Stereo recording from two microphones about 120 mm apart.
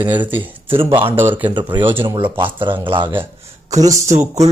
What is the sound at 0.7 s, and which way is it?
Speech, 45° right (ahead or behind).